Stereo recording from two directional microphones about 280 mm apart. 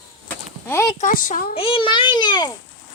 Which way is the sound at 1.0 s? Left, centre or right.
Left.